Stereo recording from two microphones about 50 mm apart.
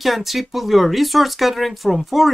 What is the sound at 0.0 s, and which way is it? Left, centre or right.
Speech, centre.